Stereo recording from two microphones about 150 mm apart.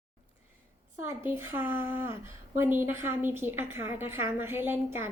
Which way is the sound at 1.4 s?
15° right (ahead or behind).